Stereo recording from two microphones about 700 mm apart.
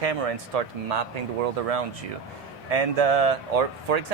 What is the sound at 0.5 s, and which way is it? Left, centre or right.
Speech, right.